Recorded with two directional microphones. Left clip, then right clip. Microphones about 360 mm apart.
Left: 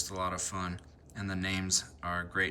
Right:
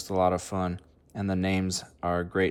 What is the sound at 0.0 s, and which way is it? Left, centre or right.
Speech, centre.